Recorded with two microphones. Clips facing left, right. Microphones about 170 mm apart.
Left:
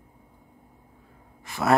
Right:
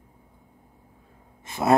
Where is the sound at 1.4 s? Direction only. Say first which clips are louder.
Right 2 dB; 20° right (ahead or behind).